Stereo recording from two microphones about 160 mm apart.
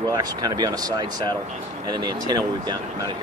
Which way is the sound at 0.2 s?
25° right (ahead or behind).